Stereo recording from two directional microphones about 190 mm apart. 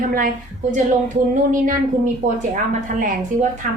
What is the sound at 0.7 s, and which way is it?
A woman's voice, 45° right (ahead or behind).